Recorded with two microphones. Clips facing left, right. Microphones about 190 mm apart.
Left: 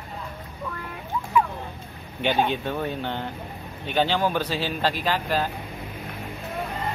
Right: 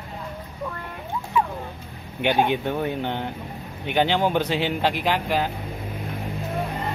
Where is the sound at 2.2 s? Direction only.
15° right (ahead or behind).